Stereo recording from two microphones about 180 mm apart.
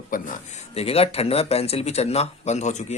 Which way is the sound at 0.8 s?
35° left (ahead or behind).